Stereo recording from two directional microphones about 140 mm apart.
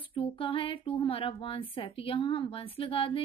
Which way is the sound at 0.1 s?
40° left (ahead or behind).